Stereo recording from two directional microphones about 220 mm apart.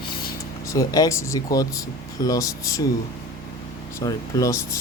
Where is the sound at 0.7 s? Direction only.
15° left (ahead or behind).